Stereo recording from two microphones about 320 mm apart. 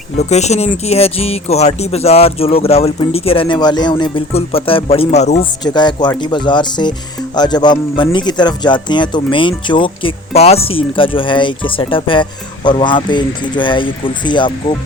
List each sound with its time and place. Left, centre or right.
0.2 s speech: left